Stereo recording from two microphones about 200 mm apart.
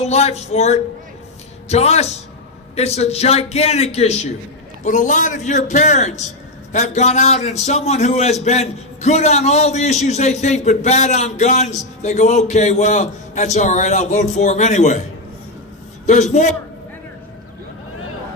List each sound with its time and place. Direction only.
0.0 s a man's voice: 30° left (ahead or behind)
16.3 s a man's voice: 35° left (ahead or behind)